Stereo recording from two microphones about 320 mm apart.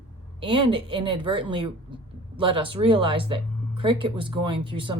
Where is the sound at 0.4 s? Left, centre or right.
Centre.